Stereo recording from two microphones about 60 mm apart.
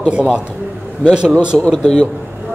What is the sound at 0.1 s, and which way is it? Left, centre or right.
Speech, centre.